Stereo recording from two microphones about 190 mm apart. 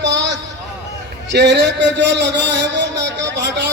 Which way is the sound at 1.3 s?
60° right (ahead or behind).